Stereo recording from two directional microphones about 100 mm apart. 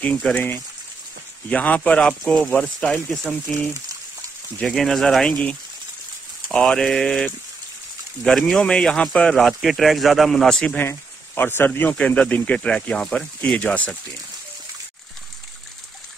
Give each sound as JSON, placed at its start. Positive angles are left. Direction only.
{"t": 0.0, "sound": "speech", "side_deg": 15}
{"t": 4.6, "sound": "speech", "side_deg": 5}
{"t": 10.8, "sound": "speech", "side_deg": 20}